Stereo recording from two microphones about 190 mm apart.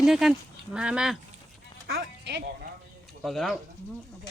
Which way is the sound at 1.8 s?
60° right (ahead or behind).